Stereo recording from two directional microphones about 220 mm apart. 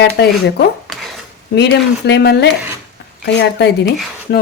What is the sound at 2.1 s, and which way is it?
Speech, 50° left (ahead or behind).